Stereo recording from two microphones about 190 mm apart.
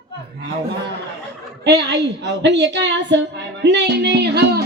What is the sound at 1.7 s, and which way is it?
Speech, 65° right (ahead or behind).